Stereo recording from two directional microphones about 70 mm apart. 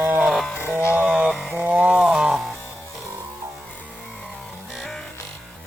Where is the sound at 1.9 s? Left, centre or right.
Centre.